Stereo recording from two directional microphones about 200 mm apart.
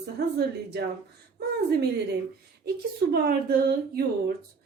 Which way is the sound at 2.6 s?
50° right (ahead or behind).